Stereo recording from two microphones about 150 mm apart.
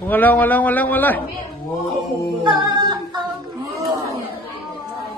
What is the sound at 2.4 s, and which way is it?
Female singing, 30° right (ahead or behind).